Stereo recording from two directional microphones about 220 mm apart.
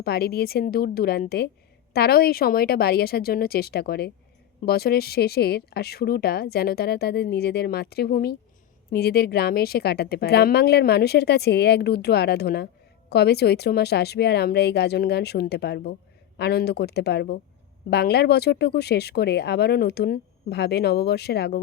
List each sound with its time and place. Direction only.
0.0 s a woman's voice: 45° left (ahead or behind)